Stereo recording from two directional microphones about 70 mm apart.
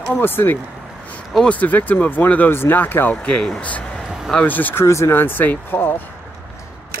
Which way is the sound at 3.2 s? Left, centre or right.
Centre.